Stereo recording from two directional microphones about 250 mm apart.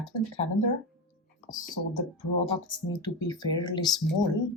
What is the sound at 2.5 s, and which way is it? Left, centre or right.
Speech, centre.